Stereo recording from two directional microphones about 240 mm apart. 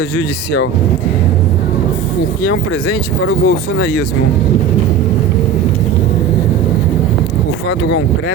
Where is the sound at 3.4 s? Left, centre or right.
Left.